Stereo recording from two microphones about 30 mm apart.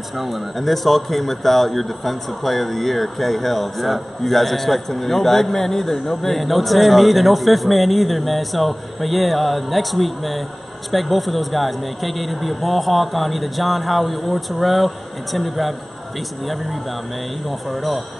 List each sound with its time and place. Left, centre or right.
0.2 s speech: centre
17.5 s speech: centre